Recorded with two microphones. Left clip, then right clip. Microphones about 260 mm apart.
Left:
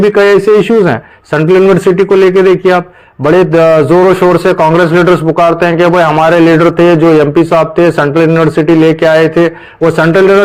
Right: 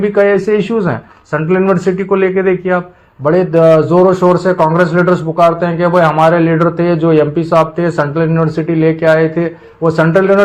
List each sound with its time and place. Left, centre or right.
0.1 s a man's voice: left